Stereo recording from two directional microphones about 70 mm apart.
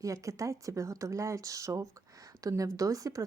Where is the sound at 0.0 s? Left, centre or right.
Right.